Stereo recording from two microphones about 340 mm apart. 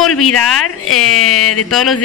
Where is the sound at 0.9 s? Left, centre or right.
Left.